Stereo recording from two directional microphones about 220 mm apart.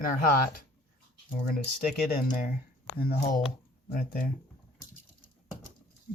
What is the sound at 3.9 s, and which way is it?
Speech, 40° left (ahead or behind).